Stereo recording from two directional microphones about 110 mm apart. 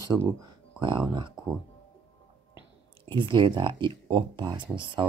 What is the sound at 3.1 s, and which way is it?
Speech, 45° right (ahead or behind).